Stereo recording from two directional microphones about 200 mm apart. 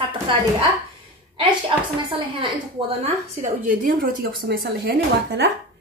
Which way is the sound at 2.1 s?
25° right (ahead or behind).